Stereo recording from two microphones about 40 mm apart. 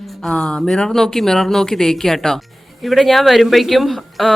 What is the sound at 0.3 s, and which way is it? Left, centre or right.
Speech, left.